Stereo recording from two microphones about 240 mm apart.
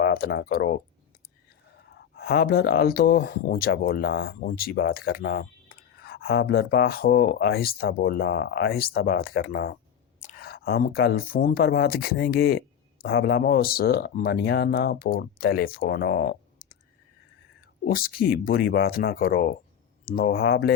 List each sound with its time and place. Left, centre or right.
0.0 s speech: left
1.9 s speech: left
10.2 s whispering: left
10.4 s speech: left
17.8 s speech: left